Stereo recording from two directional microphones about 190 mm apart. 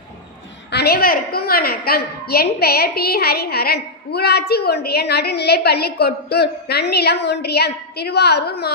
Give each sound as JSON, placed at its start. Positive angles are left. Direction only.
{"t": 0.7, "sound": "a woman's voice", "side_deg": 60}